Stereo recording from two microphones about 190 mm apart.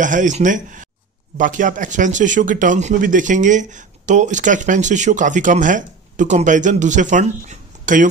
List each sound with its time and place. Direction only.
0.0 s speech: 40° right (ahead or behind)